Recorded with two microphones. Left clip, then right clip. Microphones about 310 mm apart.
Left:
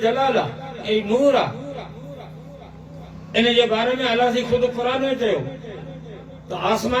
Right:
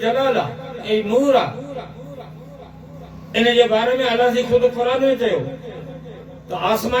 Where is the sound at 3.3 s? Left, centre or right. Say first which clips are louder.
Right 3 dB; left.